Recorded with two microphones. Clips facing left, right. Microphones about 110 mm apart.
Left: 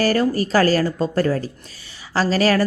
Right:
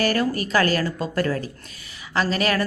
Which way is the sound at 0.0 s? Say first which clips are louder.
Left 4 dB; 30° left (ahead or behind).